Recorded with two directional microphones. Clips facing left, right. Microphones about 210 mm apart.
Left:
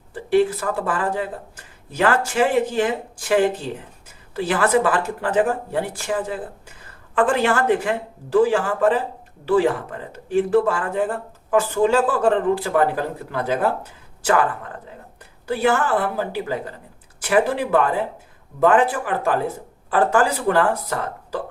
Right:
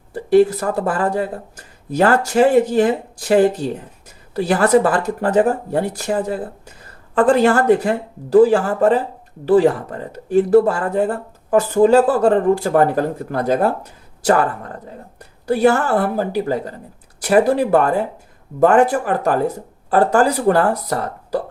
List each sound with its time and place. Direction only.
0.1 s speech: 40° right (ahead or behind)